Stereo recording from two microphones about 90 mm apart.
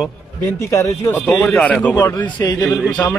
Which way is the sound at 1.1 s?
20° left (ahead or behind).